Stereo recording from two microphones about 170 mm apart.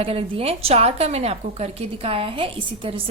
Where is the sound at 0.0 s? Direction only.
35° right (ahead or behind).